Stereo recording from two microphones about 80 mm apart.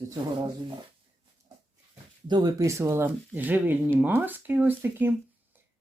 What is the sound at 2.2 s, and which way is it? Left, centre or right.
Speech, right.